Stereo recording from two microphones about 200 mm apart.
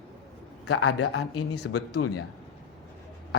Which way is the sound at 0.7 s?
90° left.